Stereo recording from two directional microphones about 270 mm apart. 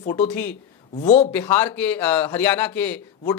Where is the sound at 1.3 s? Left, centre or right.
Centre.